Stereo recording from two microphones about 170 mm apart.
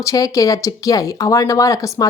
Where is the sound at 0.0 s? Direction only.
20° left (ahead or behind).